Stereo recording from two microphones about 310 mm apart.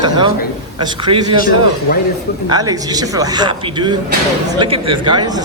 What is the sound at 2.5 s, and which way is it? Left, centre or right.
Speech, centre.